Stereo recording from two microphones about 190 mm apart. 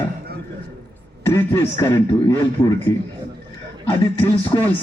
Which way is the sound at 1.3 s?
15° left (ahead or behind).